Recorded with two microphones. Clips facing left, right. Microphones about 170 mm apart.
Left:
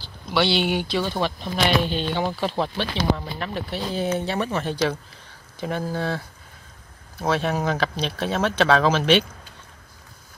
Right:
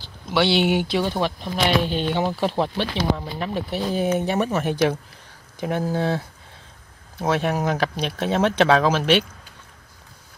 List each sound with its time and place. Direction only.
0.3 s speech: 15° right (ahead or behind)